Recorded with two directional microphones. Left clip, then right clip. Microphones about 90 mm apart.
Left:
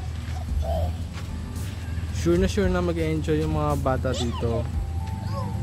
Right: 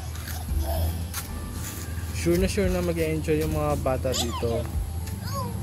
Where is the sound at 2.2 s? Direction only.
15° left (ahead or behind).